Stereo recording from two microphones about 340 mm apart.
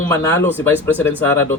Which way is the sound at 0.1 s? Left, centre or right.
Centre.